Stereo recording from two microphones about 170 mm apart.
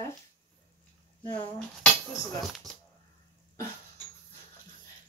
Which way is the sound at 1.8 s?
Centre (ahead or behind).